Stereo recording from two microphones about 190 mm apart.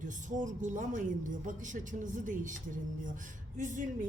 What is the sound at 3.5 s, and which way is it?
Speech, 40° right (ahead or behind).